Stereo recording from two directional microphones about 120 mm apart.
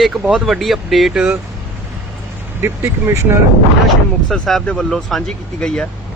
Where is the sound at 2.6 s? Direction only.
20° right (ahead or behind).